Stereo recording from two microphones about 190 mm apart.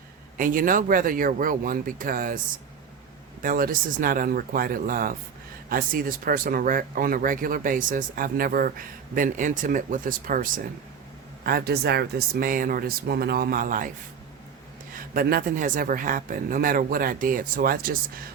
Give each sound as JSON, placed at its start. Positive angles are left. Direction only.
{"t": 0.3, "sound": "speech", "side_deg": -45}
{"t": 3.4, "sound": "speech", "side_deg": -45}
{"t": 14.9, "sound": "speech", "side_deg": -50}